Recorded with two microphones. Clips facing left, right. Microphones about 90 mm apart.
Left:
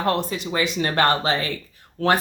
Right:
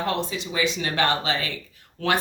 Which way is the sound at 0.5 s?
45° left (ahead or behind).